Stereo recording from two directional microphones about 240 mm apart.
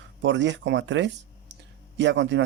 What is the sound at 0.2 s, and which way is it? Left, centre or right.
Speech, right.